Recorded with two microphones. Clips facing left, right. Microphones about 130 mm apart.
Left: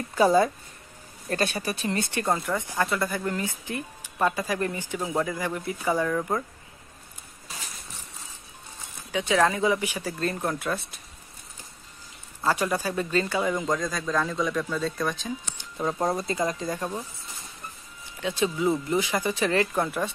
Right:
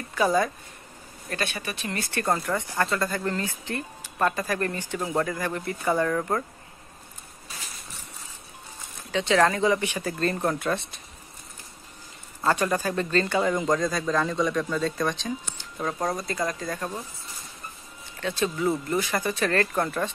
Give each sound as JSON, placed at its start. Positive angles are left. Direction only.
{"t": 0.1, "sound": "speech", "side_deg": 30}
{"t": 2.4, "sound": "speech", "side_deg": 15}
{"t": 9.1, "sound": "speech", "side_deg": 10}
{"t": 12.4, "sound": "speech", "side_deg": 5}
{"t": 18.2, "sound": "speech", "side_deg": 15}